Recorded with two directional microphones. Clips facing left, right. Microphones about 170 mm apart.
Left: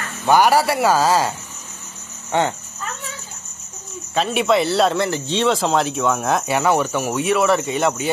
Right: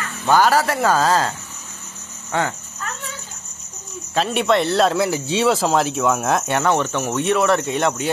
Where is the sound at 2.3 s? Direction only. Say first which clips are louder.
Left 3 dB; 20° left (ahead or behind).